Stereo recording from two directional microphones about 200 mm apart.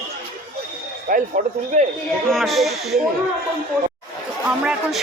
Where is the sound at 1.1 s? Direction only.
45° right (ahead or behind).